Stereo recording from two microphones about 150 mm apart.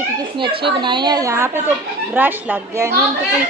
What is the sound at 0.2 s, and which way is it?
Speech, 35° right (ahead or behind).